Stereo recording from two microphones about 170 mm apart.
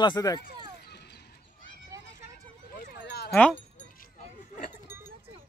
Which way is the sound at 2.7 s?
70° left (ahead or behind).